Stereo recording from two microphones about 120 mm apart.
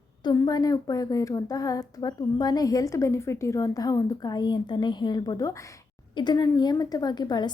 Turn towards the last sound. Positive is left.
turn(degrees=35)  # may be behind; listen again after turning